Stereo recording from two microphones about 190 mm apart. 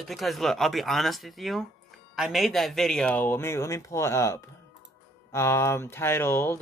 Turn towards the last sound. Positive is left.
turn(degrees=10)  # may be behind; listen again after turning